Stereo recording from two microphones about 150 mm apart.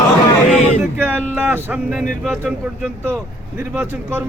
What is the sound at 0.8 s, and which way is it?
Speech, 10° right (ahead or behind).